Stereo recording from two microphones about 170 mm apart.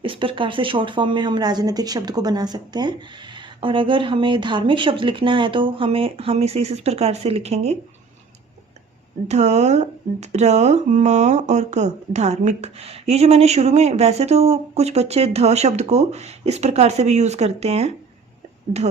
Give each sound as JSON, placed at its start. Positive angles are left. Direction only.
{"t": 0.0, "sound": "speech", "side_deg": -30}
{"t": 9.2, "sound": "speech", "side_deg": -40}